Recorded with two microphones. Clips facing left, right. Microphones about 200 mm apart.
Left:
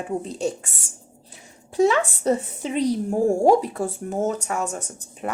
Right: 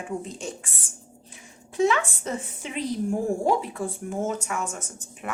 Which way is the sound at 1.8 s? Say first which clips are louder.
Left 4 dB; 35° left (ahead or behind).